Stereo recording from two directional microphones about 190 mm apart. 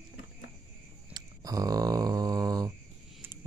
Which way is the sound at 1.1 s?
20° right (ahead or behind).